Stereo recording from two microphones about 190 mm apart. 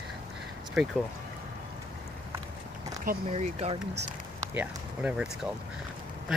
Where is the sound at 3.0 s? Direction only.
35° right (ahead or behind).